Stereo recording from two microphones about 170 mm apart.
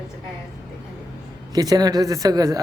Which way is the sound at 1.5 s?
25° right (ahead or behind).